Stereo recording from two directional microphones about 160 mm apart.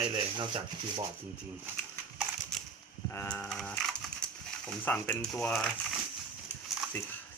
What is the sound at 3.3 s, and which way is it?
Speech, 5° left (ahead or behind).